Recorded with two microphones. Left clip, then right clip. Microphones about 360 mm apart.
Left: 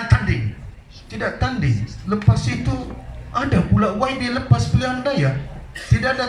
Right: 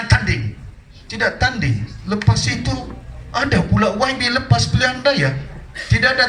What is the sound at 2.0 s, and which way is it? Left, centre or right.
Speech, right.